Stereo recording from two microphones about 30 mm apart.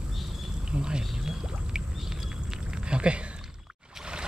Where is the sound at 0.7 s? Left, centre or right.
Right.